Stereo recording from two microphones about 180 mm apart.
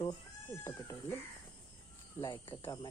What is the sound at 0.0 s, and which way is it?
Cat, 15° left (ahead or behind).